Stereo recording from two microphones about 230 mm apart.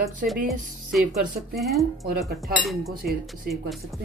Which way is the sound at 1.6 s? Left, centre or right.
Centre.